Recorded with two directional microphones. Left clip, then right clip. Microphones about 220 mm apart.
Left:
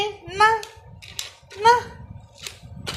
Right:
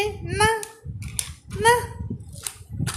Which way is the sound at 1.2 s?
15° right (ahead or behind).